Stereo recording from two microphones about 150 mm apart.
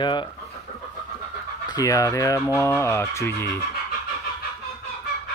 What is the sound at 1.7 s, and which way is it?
Fowl, 25° left (ahead or behind).